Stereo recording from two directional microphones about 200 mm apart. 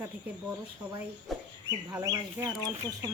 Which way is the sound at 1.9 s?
20° right (ahead or behind).